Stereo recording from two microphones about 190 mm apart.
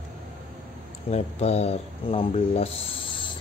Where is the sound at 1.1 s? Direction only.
35° left (ahead or behind).